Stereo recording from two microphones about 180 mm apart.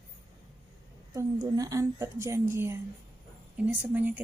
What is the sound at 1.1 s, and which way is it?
A woman's voice, 20° right (ahead or behind).